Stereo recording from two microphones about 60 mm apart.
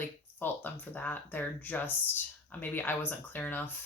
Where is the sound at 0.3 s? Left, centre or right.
Left.